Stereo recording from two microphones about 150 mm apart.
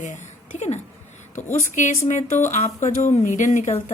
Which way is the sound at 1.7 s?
55° left (ahead or behind).